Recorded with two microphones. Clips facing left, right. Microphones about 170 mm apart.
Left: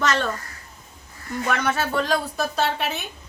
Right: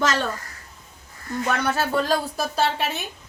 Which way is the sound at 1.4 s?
Centre (ahead or behind).